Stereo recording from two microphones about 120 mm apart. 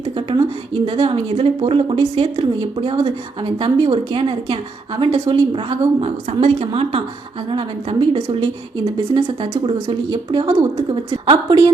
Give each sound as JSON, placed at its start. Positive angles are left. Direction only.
{"t": 0.9, "sound": "a woman's voice", "side_deg": -50}
{"t": 6.0, "sound": "a woman's voice", "side_deg": -55}